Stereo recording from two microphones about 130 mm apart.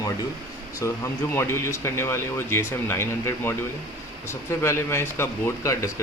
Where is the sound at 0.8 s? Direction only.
25° left (ahead or behind).